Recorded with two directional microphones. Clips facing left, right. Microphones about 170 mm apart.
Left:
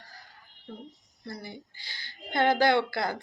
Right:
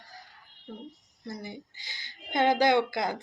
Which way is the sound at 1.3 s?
15° right (ahead or behind).